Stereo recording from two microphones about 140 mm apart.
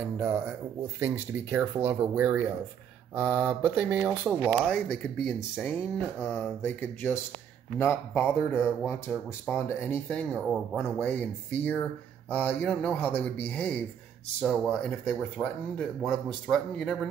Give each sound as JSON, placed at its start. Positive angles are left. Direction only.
{"t": 0.2, "sound": "speech", "side_deg": -10}
{"t": 4.6, "sound": "speech", "side_deg": 0}
{"t": 9.5, "sound": "speech", "side_deg": 10}
{"t": 10.3, "sound": "speech", "side_deg": -5}
{"t": 11.0, "sound": "speech", "side_deg": 10}